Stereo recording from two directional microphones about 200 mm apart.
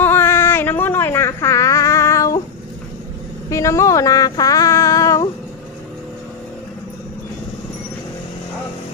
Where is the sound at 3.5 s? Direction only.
15° left (ahead or behind).